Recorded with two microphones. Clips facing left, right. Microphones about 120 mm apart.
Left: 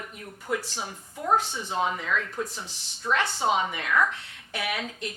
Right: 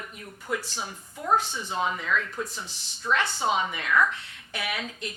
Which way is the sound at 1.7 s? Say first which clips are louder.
Even; 45° left (ahead or behind).